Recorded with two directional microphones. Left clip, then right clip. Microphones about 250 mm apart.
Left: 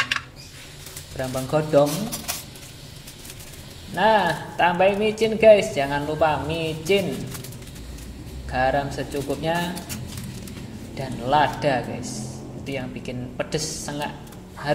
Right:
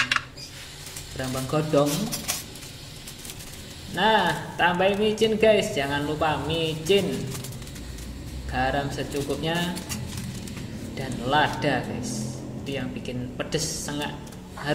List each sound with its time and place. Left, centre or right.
1.1 s speech: centre
3.9 s speech: centre
8.5 s speech: centre
11.0 s speech: centre